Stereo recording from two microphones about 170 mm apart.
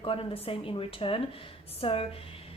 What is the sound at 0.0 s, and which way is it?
A woman's voice, 30° left (ahead or behind).